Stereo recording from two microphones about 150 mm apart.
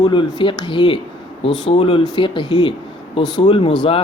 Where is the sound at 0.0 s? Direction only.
35° left (ahead or behind).